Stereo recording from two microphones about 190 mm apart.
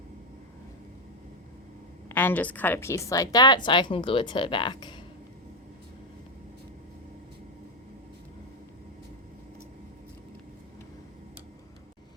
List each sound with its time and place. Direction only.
2.0 s a woman's voice: 10° left (ahead or behind)